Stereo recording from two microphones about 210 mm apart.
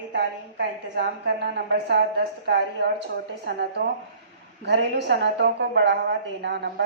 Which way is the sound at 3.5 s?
50° right (ahead or behind).